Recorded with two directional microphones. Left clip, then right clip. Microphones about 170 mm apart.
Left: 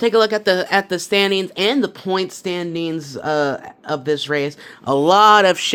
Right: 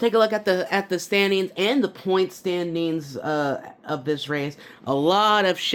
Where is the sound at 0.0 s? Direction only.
25° left (ahead or behind).